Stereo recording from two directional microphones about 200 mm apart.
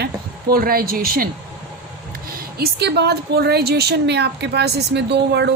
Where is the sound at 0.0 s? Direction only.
45° right (ahead or behind).